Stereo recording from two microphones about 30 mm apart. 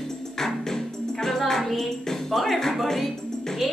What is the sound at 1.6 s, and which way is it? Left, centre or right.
Music, centre.